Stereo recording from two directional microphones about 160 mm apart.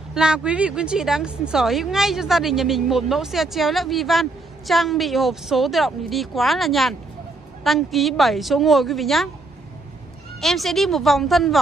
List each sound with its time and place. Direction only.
0.1 s speech: 5° right (ahead or behind)
10.4 s speech: centre (ahead or behind)